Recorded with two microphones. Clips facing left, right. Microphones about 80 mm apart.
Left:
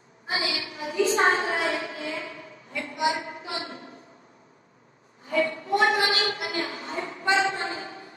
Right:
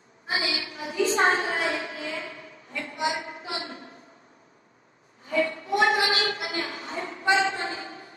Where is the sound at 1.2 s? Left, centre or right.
Left.